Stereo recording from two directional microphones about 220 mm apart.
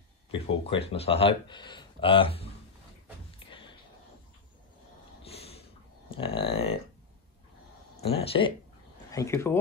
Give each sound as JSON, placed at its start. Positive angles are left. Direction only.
{"t": 0.3, "sound": "speech", "side_deg": 25}
{"t": 3.4, "sound": "a sound", "side_deg": 25}
{"t": 5.3, "sound": "a sound", "side_deg": 25}
{"t": 6.0, "sound": "speech", "side_deg": 25}
{"t": 8.0, "sound": "speech", "side_deg": 25}
{"t": 9.1, "sound": "speech", "side_deg": 15}